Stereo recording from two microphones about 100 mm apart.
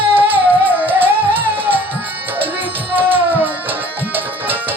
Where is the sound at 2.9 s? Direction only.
20° right (ahead or behind).